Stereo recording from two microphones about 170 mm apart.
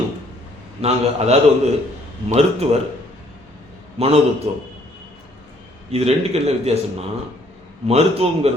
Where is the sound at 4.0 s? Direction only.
40° right (ahead or behind).